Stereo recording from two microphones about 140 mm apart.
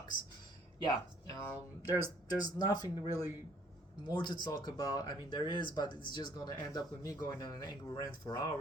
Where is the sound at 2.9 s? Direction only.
15° right (ahead or behind).